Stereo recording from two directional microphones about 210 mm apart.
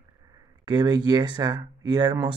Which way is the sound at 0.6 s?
20° right (ahead or behind).